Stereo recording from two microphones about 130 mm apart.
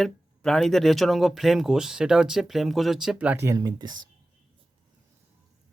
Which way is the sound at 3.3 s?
25° right (ahead or behind).